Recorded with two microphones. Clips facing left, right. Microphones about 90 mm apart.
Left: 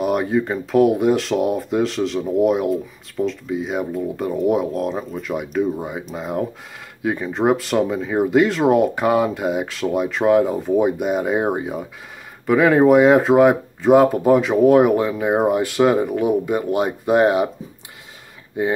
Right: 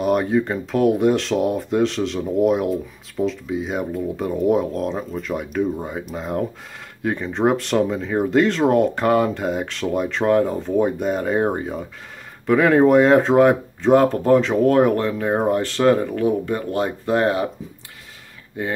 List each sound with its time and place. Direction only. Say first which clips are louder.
0.0 s speech: right 1 dB; 5° left (ahead or behind)
18.6 s speech: left 5 dB; 20° left (ahead or behind)